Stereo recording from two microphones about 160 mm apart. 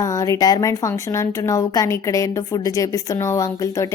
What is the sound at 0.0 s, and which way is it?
A woman's voice, 20° left (ahead or behind).